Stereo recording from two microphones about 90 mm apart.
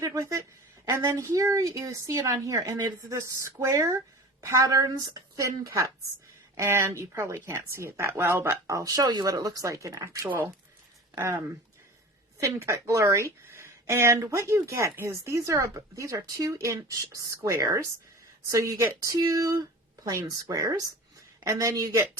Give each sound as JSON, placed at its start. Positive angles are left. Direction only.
{"t": 0.0, "sound": "speech", "side_deg": -40}
{"t": 0.9, "sound": "a woman's voice", "side_deg": -25}
{"t": 1.1, "sound": "speech", "side_deg": -40}
{"t": 8.6, "sound": "speech", "side_deg": -40}